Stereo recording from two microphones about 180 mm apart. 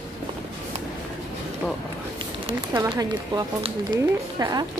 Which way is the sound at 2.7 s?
20° right (ahead or behind).